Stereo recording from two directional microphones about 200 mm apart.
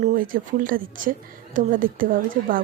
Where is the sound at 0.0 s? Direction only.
45° right (ahead or behind).